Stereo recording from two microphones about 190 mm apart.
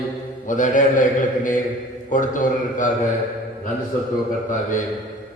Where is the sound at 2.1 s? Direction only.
45° left (ahead or behind).